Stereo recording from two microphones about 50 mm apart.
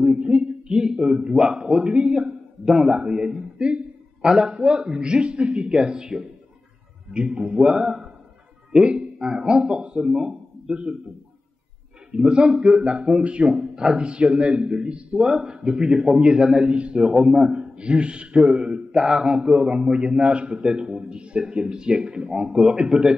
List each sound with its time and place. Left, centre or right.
0.0 s a sound: centre
0.7 s a man's voice: centre
8.8 s a man's voice: right
12.1 s a man's voice: right
15.2 s a man's voice: centre
17.0 s a man's voice: centre
18.9 s a man's voice: centre